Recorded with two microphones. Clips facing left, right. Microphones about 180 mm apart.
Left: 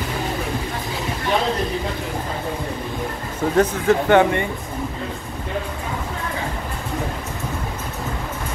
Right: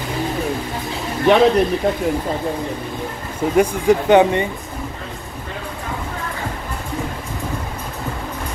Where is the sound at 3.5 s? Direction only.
15° right (ahead or behind).